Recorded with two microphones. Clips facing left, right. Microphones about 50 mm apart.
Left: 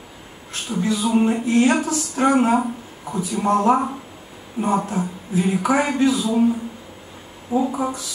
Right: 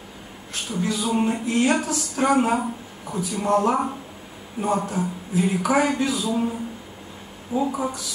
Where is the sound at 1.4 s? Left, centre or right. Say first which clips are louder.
Left 4 dB; left.